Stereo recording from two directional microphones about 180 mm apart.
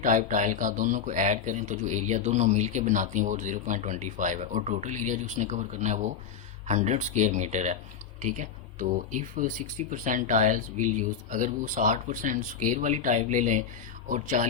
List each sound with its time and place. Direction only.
0.0 s speech: 45° right (ahead or behind)